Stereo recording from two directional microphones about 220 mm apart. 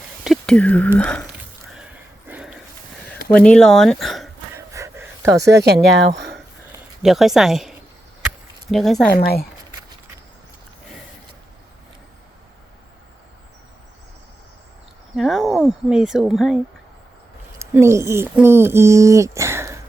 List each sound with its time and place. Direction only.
0.3 s speech: 5° left (ahead or behind)
2.2 s a sound: 5° right (ahead or behind)
3.2 s speech: 5° left (ahead or behind)
4.5 s gasp: 10° right (ahead or behind)
5.5 s speech: 50° right (ahead or behind)
7.0 s speech: centre (ahead or behind)
8.7 s speech: centre (ahead or behind)
9.1 s speech: 45° left (ahead or behind)
15.1 s speech: centre (ahead or behind)
17.6 s speech: 10° right (ahead or behind)